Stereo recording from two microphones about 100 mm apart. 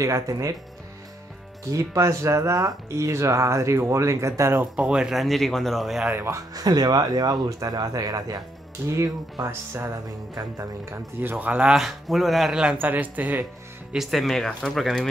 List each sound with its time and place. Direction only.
0.0 s speech: 35° right (ahead or behind)
1.7 s speech: 30° right (ahead or behind)
4.7 s speech: 10° right (ahead or behind)
6.1 s speech: 30° right (ahead or behind)
11.1 s speech: 20° right (ahead or behind)
11.7 s speech: centre (ahead or behind)
12.8 s speech: 15° right (ahead or behind)
13.9 s speech: centre (ahead or behind)